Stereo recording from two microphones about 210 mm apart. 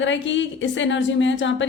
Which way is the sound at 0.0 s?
60° left (ahead or behind).